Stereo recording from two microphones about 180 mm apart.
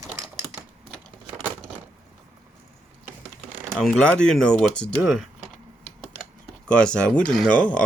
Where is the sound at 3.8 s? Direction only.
5° left (ahead or behind).